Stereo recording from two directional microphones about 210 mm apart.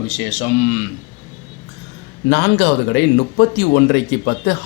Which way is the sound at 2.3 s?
50° left (ahead or behind).